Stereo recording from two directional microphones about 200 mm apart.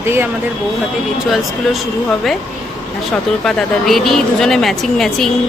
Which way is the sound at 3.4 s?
5° left (ahead or behind).